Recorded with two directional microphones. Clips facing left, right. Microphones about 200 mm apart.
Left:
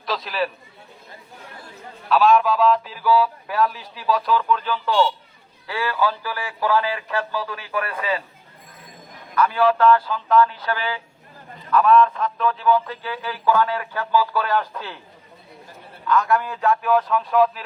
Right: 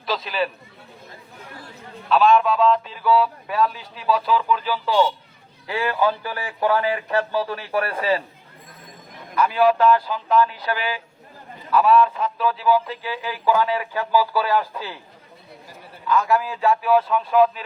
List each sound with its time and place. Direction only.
0.0 s a man's voice: centre (ahead or behind)
2.0 s a man's voice: centre (ahead or behind)
5.6 s speech: 20° right (ahead or behind)
9.3 s a man's voice: 10° right (ahead or behind)
16.0 s a man's voice: 5° right (ahead or behind)